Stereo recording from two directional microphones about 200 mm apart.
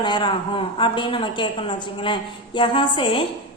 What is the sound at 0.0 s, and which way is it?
A woman's voice, 25° left (ahead or behind).